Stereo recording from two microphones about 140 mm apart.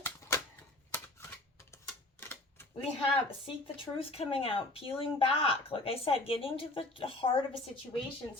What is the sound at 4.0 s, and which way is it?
Speech, 40° left (ahead or behind).